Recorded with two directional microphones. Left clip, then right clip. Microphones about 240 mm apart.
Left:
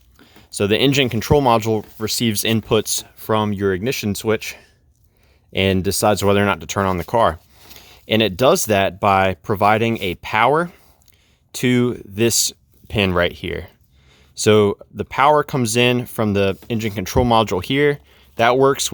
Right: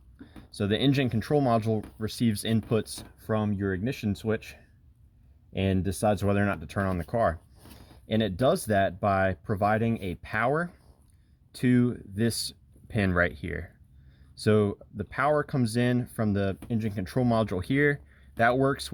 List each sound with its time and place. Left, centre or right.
0.2 s speech: left